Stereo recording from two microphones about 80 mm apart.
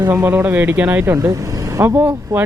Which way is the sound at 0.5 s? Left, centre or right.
Right.